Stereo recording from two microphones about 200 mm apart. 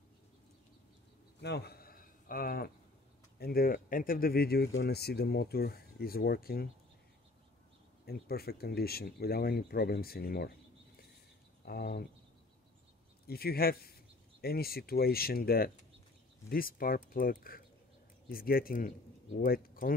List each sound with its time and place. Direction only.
1.4 s a sound: 55° left (ahead or behind)
3.3 s speech: 50° left (ahead or behind)
8.0 s speech: 50° left (ahead or behind)
11.6 s speech: 50° left (ahead or behind)
13.3 s speech: 50° left (ahead or behind)